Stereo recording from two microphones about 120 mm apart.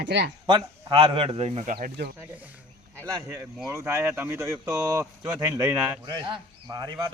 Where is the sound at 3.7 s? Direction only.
25° right (ahead or behind).